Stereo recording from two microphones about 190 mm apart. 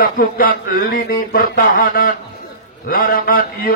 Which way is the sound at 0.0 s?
50° left (ahead or behind).